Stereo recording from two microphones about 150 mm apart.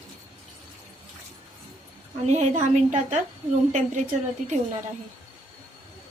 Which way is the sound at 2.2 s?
50° right (ahead or behind).